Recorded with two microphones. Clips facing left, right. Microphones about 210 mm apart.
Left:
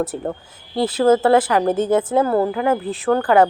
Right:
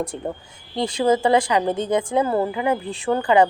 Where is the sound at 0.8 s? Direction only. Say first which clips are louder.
Left 4 dB; 5° left (ahead or behind).